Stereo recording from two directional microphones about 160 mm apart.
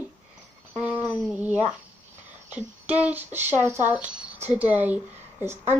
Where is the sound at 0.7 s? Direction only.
10° right (ahead or behind).